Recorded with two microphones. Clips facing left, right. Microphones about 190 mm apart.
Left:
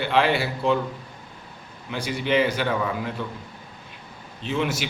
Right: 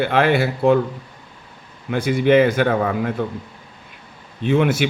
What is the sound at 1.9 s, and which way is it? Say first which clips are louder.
A man's voice: right 9 dB; 55° right (ahead or behind).